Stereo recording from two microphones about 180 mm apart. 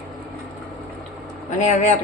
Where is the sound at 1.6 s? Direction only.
40° left (ahead or behind).